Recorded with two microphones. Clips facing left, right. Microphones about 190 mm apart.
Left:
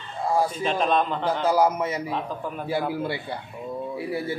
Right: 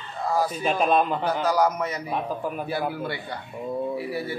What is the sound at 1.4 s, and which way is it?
Speech, 25° left (ahead or behind).